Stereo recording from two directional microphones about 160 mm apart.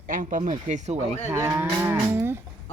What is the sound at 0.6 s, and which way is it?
Speech, 45° right (ahead or behind).